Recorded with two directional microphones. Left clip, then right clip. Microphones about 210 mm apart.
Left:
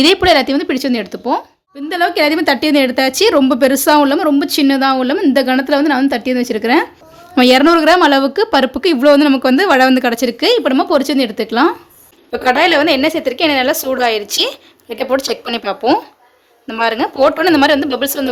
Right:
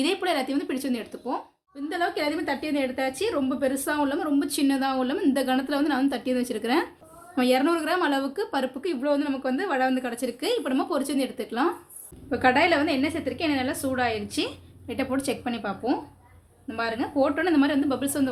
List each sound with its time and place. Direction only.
0.0 s speech: 35° left (ahead or behind)
7.3 s speech: 40° left (ahead or behind)
12.5 s a woman's voice: 50° left (ahead or behind)